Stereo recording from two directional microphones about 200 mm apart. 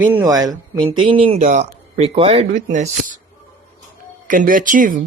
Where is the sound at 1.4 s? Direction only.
40° right (ahead or behind).